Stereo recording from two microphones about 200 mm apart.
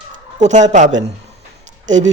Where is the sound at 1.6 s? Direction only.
35° right (ahead or behind).